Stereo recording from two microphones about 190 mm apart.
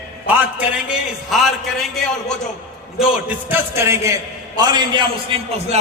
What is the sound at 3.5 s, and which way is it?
A man's voice, 10° right (ahead or behind).